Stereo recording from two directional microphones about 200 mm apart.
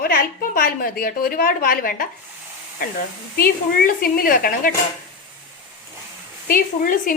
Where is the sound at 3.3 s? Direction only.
50° left (ahead or behind).